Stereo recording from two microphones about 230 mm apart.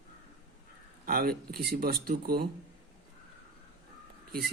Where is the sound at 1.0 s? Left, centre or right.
Right.